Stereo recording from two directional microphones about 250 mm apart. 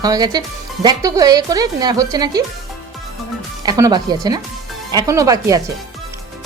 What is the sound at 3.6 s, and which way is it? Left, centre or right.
Speech, centre.